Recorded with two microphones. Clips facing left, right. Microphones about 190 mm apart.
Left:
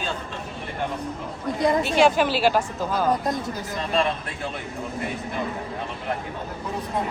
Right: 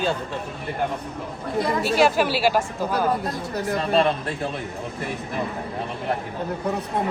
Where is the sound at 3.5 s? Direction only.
65° right (ahead or behind).